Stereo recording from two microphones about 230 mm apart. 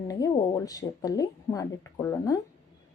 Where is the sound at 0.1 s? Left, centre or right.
Centre.